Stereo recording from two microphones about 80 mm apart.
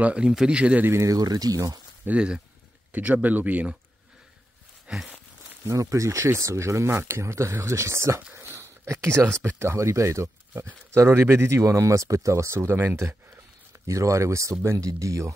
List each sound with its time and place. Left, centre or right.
0.0 s speech: centre
0.8 s speech: right
1.1 s speech: right
2.0 s speech: centre
4.8 s a sound: centre
5.7 s speech: right